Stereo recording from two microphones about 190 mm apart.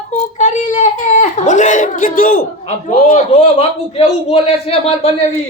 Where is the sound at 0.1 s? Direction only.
40° left (ahead or behind).